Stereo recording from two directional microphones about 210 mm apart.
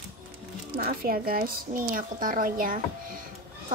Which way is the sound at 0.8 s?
45° right (ahead or behind).